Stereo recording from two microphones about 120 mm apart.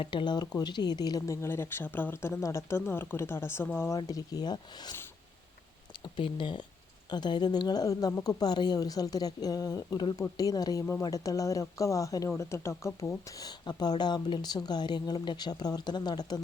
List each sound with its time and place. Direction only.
0.0 s speech: 45° left (ahead or behind); by 3.9 s 20° left (ahead or behind)
3.9 s a woman's voice: 30° left (ahead or behind)
6.1 s a woman's voice: 45° left (ahead or behind); by 13.5 s 25° left (ahead or behind)
13.7 s a woman's voice: 35° left (ahead or behind)